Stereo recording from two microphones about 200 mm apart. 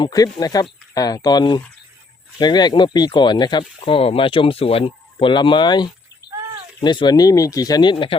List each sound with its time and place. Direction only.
0.0 s speech: 20° left (ahead or behind)
6.2 s bird: 55° left (ahead or behind)
6.8 s speech: 20° left (ahead or behind)